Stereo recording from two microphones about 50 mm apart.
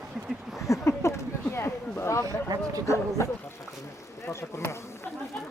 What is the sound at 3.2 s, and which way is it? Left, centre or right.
Speech, left.